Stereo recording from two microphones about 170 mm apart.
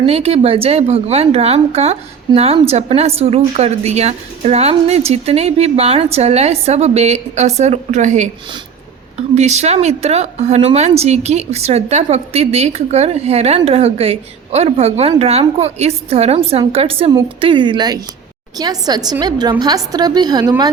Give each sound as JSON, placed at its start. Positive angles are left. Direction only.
{"t": 0.0, "sound": "a woman's voice", "side_deg": -35}
{"t": 9.3, "sound": "a woman's voice", "side_deg": -40}